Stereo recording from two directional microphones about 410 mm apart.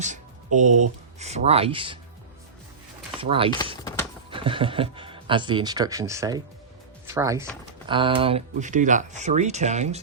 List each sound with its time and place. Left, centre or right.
0.0 s speech: centre
3.2 s speech: centre